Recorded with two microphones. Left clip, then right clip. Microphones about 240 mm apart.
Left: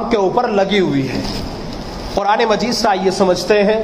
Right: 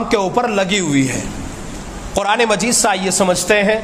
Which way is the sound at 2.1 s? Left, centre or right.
Right.